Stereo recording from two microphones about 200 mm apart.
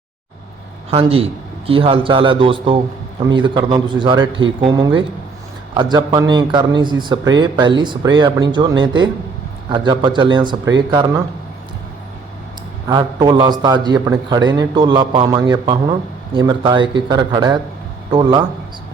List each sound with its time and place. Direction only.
0.9 s speech: 30° right (ahead or behind)
12.9 s speech: 20° right (ahead or behind)